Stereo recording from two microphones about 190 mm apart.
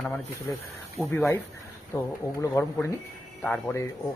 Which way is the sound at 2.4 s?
15° left (ahead or behind).